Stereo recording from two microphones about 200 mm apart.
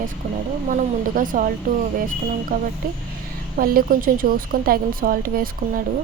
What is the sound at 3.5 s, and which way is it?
Speech, 45° right (ahead or behind).